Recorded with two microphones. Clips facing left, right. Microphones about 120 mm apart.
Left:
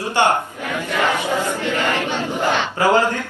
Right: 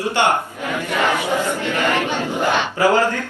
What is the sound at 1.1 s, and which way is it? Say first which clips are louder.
Speech: right 1 dB; 15° right (ahead or behind).